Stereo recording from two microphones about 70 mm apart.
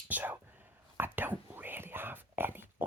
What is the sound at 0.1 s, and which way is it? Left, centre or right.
Speech, right.